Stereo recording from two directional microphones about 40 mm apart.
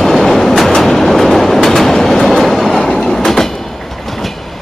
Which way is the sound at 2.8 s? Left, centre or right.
Centre.